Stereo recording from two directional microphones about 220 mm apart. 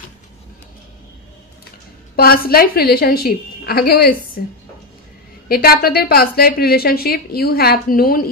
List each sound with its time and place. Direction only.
2.1 s a woman's voice: 45° left (ahead or behind)
5.5 s a woman's voice: 45° left (ahead or behind)